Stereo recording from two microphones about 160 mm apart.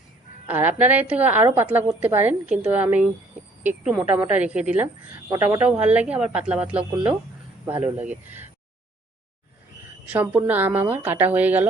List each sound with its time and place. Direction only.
0.4 s a woman's voice: 10° right (ahead or behind)
7.8 s speech: 40° right (ahead or behind)
10.1 s a woman's voice: 10° right (ahead or behind)